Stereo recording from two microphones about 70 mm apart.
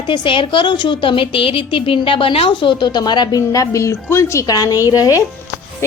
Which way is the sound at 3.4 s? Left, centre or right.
Left.